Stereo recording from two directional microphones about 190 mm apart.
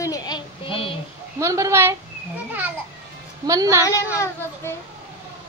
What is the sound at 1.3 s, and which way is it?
A woman's voice, 15° right (ahead or behind).